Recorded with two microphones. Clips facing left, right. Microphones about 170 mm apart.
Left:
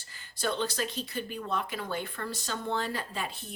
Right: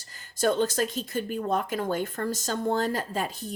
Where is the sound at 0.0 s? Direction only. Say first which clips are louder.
Right 8 dB; 45° right (ahead or behind).